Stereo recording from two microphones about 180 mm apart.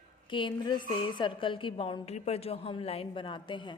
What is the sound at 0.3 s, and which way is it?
A woman's voice, 25° left (ahead or behind).